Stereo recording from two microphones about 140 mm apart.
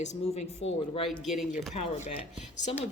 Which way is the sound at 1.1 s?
Centre (ahead or behind).